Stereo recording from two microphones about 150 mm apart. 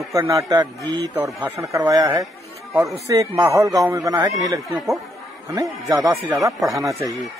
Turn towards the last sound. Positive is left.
turn(degrees=-20)  # may be behind; listen again after turning